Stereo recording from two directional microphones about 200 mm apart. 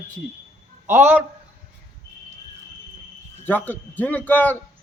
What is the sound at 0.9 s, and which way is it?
Speech, 10° right (ahead or behind).